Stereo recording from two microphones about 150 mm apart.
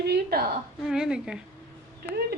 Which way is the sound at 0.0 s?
90° right.